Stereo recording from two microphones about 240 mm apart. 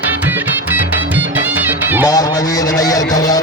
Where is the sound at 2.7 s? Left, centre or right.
Centre.